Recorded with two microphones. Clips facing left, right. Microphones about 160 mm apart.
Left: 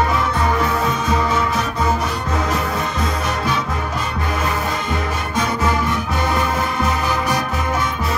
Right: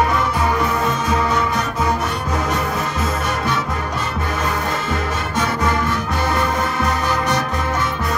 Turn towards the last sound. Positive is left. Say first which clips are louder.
# even
turn(degrees=10)  # may be behind; listen again after turning